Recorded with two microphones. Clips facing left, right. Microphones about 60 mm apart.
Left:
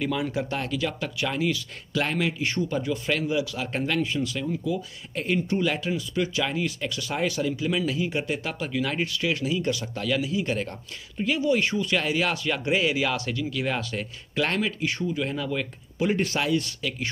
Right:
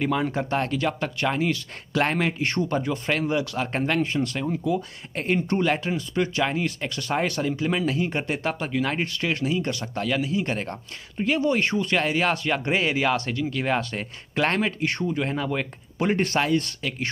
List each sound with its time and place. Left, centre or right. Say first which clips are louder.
0.0 s speech: right 3 dB; right
14.9 s speech: right 2 dB; right
15.1 s speech: right 2 dB; right